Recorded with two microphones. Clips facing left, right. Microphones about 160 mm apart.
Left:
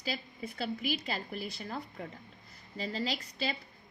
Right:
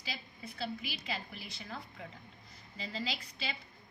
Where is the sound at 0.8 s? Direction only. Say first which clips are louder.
Left 7 dB; 45° left (ahead or behind).